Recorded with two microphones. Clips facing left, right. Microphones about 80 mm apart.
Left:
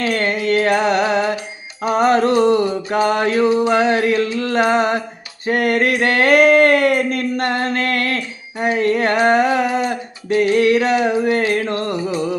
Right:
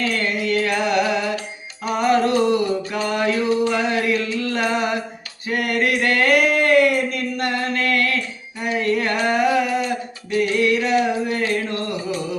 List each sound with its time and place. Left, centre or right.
0.1 s music: left
5.5 s a sound: left
10.5 s music: left